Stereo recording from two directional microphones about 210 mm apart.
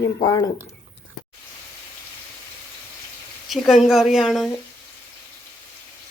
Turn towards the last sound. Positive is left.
turn(degrees=0)  # may be behind; listen again after turning